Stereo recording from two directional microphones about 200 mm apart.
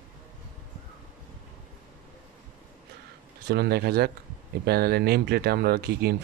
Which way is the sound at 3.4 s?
55° right (ahead or behind).